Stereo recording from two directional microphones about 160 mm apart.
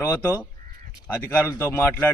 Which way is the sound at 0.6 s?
60° right (ahead or behind).